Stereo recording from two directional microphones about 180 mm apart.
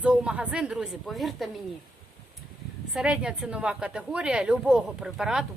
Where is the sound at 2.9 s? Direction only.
5° right (ahead or behind).